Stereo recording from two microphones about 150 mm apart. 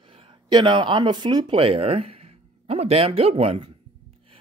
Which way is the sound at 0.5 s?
30° right (ahead or behind).